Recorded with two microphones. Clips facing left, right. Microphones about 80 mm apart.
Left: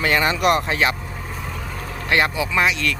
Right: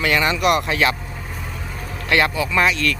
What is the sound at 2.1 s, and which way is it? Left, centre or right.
Speech, left.